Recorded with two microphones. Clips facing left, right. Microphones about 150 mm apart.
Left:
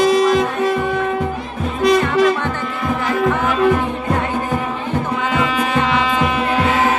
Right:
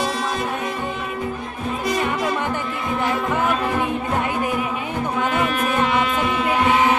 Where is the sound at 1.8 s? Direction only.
90° left.